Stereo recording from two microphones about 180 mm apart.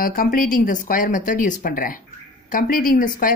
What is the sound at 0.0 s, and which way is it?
Speech, 50° left (ahead or behind).